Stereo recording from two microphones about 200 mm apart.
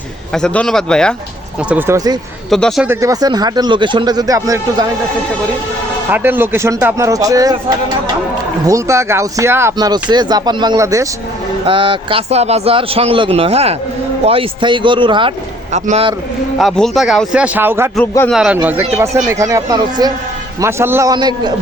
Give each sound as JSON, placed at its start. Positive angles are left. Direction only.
{"t": 0.3, "sound": "a man's voice", "side_deg": 5}
{"t": 1.7, "sound": "speech", "side_deg": -15}
{"t": 2.5, "sound": "a man's voice", "side_deg": 0}
{"t": 2.8, "sound": "a man's voice", "side_deg": -15}
{"t": 6.1, "sound": "speech", "side_deg": -10}
{"t": 8.6, "sound": "a man's voice", "side_deg": -15}
{"t": 16.6, "sound": "a man's voice", "side_deg": 0}
{"t": 17.9, "sound": "a man's voice", "side_deg": 10}
{"t": 18.3, "sound": "speech", "side_deg": -5}